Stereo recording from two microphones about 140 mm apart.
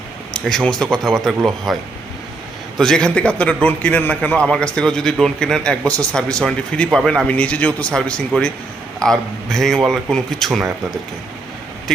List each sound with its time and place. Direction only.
0.3 s speech: 5° left (ahead or behind)